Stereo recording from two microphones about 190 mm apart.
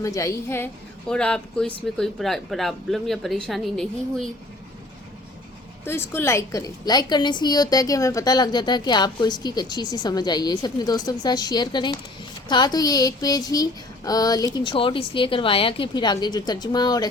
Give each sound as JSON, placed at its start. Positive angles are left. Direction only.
{"t": 0.0, "sound": "a woman's voice", "side_deg": 15}
{"t": 5.8, "sound": "a woman's voice", "side_deg": 10}